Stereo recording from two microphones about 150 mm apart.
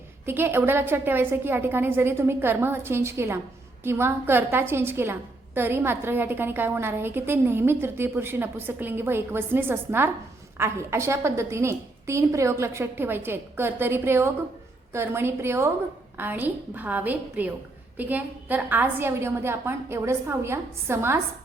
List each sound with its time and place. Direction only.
0.3 s a woman's voice: 15° right (ahead or behind)